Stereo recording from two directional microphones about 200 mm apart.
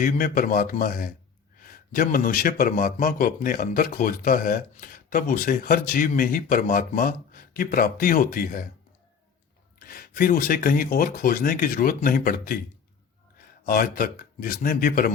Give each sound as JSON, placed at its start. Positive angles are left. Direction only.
{"t": 0.0, "sound": "a man's voice", "side_deg": 45}
{"t": 9.7, "sound": "a man's voice", "side_deg": 45}
{"t": 13.7, "sound": "a man's voice", "side_deg": 45}